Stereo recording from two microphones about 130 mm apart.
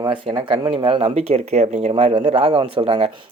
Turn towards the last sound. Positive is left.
turn(degrees=-55)  # may be behind; listen again after turning